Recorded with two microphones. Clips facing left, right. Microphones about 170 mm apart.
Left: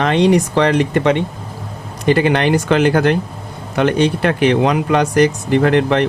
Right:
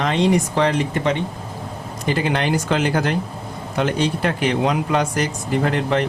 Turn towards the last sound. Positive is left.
turn(degrees=70)  # may be behind; listen again after turning